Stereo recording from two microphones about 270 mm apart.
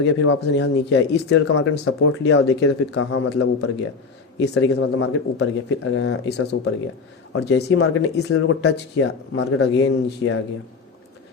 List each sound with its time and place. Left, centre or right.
0.0 s speech: left